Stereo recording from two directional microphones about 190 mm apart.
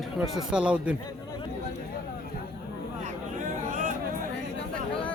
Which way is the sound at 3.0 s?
40° right (ahead or behind).